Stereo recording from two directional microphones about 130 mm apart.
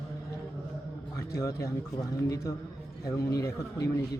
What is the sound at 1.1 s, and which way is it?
Speech, 25° left (ahead or behind).